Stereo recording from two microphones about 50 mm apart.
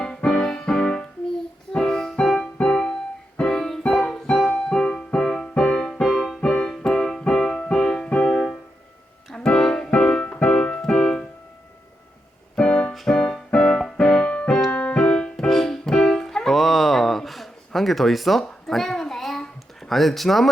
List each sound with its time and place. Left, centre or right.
0.0 s music: centre
9.3 s keyboard: centre
12.5 s keyboard: centre
12.9 s music: centre
15.4 s music: centre
19.9 s speech: centre